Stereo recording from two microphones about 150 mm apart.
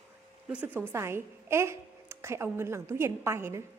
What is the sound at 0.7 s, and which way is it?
A woman's voice, 15° right (ahead or behind).